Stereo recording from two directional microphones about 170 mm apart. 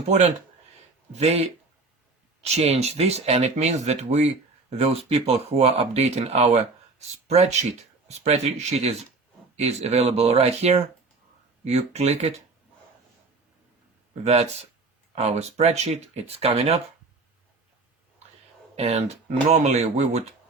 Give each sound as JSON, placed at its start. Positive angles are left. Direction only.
{"t": 1.2, "sound": "speech", "side_deg": -35}
{"t": 8.2, "sound": "speech", "side_deg": -40}
{"t": 14.3, "sound": "speech", "side_deg": -40}
{"t": 18.8, "sound": "speech", "side_deg": -40}